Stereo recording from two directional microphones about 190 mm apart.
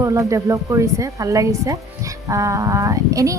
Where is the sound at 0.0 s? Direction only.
15° right (ahead or behind).